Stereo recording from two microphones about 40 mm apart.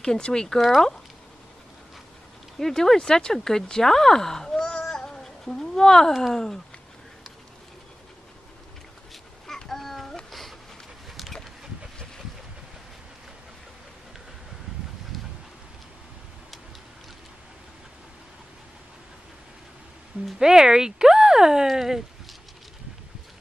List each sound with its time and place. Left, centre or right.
0.0 s speech: centre
2.6 s speech: centre
4.8 s a sound: centre
6.3 s speech: centre
9.7 s a sound: centre
20.3 s speech: centre